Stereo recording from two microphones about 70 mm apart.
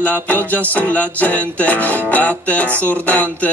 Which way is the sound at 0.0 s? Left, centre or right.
Left.